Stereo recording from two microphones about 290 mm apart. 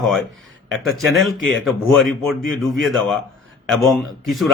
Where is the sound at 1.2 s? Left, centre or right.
Centre.